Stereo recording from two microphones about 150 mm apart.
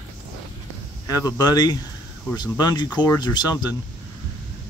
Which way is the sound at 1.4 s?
25° left (ahead or behind).